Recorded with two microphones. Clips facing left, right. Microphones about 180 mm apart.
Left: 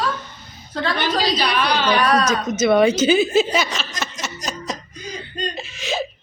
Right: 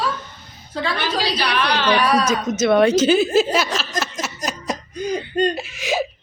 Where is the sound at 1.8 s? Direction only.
10° right (ahead or behind).